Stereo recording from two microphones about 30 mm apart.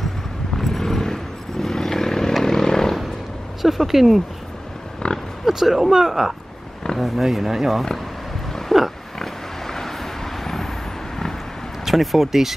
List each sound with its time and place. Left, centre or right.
0.6 s vehicle: centre
3.6 s speech: centre
5.0 s oink: left
5.5 s speech: centre
7.3 s speech: centre
8.7 s pig: centre
9.2 s vehicle: centre
11.8 s speech: centre